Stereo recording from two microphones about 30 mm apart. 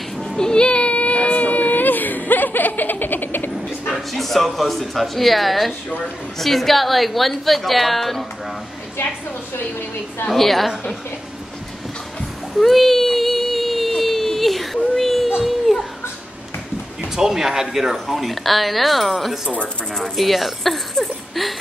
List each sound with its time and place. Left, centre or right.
0.4 s a sound: left
3.9 s a woman's voice: centre
10.3 s a woman's voice: centre
12.5 s a sound: centre
17.1 s speech: centre
18.0 s a woman's voice: centre